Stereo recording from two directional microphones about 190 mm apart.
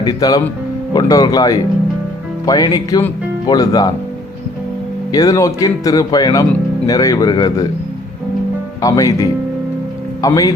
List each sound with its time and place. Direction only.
0.0 s speech: 20° left (ahead or behind)
5.1 s speech: 20° left (ahead or behind)
8.8 s speech: 20° left (ahead or behind)